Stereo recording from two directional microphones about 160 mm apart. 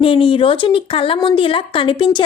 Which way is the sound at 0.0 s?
35° left (ahead or behind).